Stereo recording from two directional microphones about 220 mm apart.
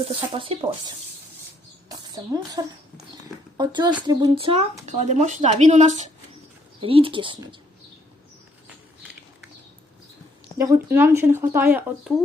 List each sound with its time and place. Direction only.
0.0 s speech: 25° right (ahead or behind)
1.9 s a sound: 15° right (ahead or behind)
3.6 s speech: 20° right (ahead or behind)
10.6 s speech: 15° right (ahead or behind)